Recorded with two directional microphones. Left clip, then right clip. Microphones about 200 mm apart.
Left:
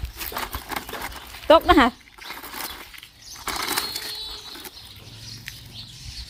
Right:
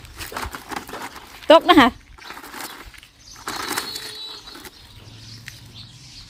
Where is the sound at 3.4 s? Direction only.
15° left (ahead or behind).